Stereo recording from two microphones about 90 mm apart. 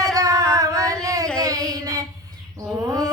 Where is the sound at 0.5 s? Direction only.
40° right (ahead or behind).